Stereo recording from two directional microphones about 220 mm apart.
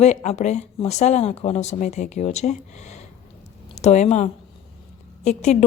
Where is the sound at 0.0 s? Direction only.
30° left (ahead or behind).